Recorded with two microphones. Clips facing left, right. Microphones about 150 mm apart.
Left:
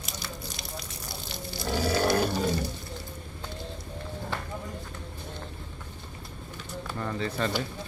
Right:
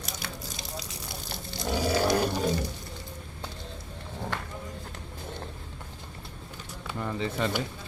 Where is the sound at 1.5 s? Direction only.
15° right (ahead or behind).